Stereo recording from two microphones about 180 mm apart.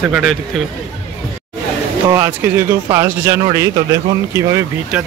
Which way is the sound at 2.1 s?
15° right (ahead or behind).